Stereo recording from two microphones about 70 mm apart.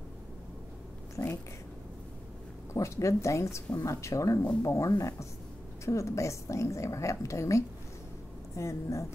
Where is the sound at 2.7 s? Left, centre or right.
Left.